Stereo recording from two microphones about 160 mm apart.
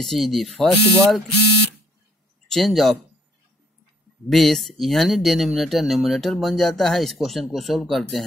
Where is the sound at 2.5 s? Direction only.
Centre (ahead or behind).